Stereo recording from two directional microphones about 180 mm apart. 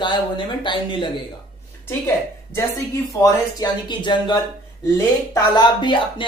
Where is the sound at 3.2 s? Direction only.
20° left (ahead or behind).